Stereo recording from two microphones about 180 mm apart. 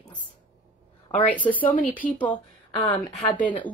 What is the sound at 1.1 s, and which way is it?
Speech, 45° left (ahead or behind).